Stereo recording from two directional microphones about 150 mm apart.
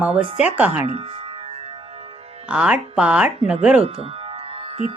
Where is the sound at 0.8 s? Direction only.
40° right (ahead or behind).